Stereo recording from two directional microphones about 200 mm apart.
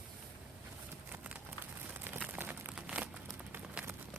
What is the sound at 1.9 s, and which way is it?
Crumpling, 10° right (ahead or behind).